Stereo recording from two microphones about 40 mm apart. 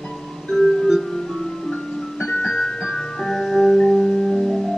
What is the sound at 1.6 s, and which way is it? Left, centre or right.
Music, centre.